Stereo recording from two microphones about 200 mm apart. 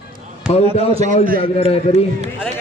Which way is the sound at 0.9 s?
30° right (ahead or behind).